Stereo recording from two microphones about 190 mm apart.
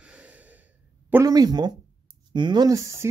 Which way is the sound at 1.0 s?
15° right (ahead or behind).